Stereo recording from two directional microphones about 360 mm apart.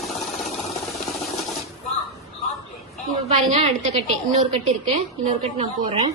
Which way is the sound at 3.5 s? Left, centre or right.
Centre.